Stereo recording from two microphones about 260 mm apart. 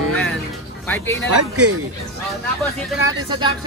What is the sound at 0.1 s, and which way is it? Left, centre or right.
Music, centre.